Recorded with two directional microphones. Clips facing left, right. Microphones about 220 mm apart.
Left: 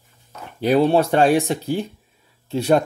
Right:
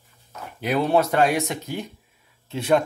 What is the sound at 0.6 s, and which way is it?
Speech, 30° left (ahead or behind).